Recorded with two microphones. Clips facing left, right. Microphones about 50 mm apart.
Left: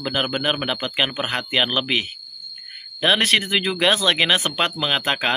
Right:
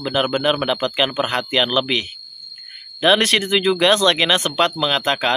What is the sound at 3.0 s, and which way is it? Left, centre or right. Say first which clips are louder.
Speech: right 3 dB; centre.